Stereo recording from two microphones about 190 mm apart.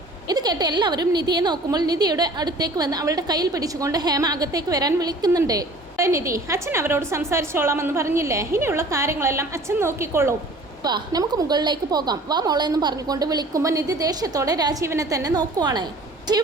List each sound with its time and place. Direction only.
0.3 s a woman's voice: 20° right (ahead or behind)